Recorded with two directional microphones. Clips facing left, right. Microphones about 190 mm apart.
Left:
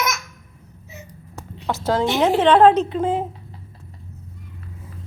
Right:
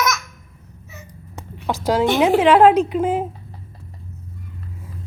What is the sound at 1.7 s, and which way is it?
A woman's voice, 15° right (ahead or behind).